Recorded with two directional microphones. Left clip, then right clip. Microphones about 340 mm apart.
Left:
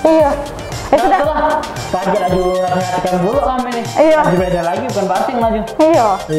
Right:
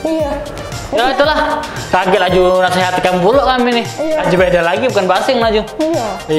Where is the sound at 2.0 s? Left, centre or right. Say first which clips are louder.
Right 4 dB; centre.